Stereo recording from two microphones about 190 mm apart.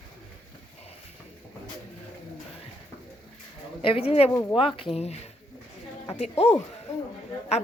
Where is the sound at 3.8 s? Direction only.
30° left (ahead or behind).